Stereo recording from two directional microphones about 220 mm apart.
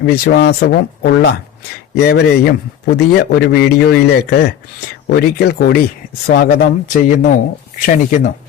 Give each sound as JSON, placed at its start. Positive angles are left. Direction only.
{"t": 0.0, "sound": "a man's voice", "side_deg": 50}